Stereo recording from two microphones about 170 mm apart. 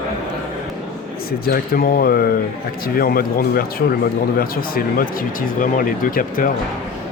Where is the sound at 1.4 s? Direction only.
60° left (ahead or behind).